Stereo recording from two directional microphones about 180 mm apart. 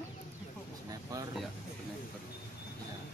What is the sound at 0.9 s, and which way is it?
Speech, 20° right (ahead or behind).